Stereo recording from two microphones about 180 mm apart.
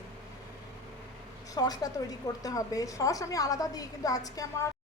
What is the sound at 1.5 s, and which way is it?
A woman's voice, 20° left (ahead or behind).